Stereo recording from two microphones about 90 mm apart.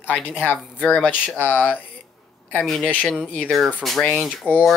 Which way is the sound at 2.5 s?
10° left (ahead or behind).